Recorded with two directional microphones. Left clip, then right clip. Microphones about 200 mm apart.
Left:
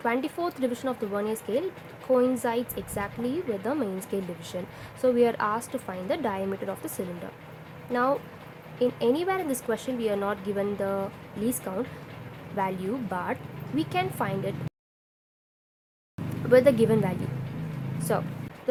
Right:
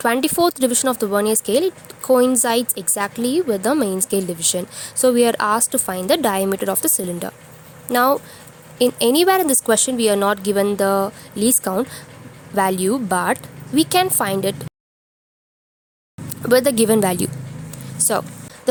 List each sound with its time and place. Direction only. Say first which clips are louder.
0.0 s a woman's voice: right 11 dB; 45° right (ahead or behind)
16.5 s a woman's voice: right 5 dB; 45° right (ahead or behind)